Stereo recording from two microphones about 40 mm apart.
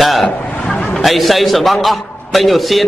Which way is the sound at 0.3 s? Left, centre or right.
Left.